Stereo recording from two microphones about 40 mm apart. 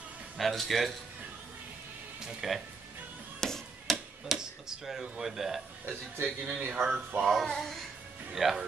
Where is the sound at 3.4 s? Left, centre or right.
Centre.